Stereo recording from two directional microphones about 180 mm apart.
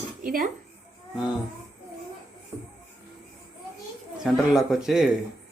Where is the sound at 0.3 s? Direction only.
50° right (ahead or behind).